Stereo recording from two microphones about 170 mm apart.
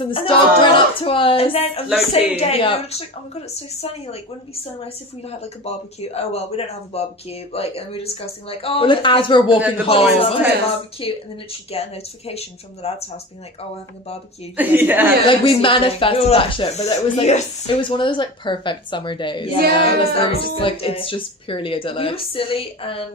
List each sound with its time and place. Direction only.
0.0 s speech: 30° left (ahead or behind)
5.2 s speech: 35° left (ahead or behind)
9.6 s a woman's voice: 10° right (ahead or behind)
9.8 s speech: 35° left (ahead or behind)
14.5 s a woman's voice: 10° right (ahead or behind)
15.3 s speech: 30° left (ahead or behind)